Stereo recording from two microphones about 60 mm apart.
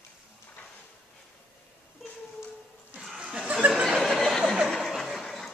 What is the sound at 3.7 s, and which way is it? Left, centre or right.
Snicker, centre.